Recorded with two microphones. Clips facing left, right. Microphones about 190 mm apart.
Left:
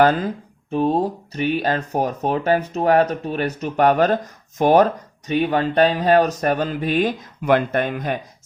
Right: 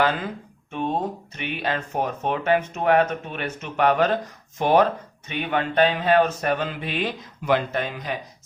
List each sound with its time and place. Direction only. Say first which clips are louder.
0.0 s speech: left 6 dB; 40° left (ahead or behind)